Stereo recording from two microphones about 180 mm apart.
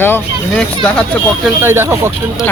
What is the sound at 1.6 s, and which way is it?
Speech, 15° right (ahead or behind).